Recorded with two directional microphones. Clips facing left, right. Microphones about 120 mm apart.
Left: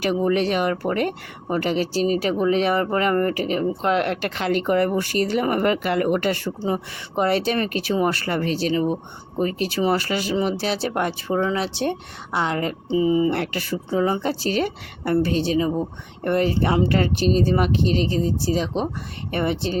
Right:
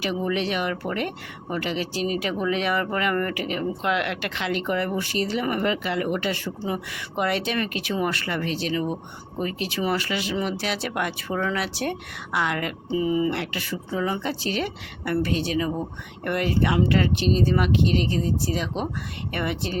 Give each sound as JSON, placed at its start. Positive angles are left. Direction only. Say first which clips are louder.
{"t": 0.0, "sound": "speech", "louder": "left 5 dB", "side_deg": 45}
{"t": 13.3, "sound": "speech", "louder": "left 5 dB", "side_deg": 45}